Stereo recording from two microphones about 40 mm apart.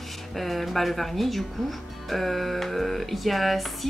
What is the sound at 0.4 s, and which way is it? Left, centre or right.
Speech, centre.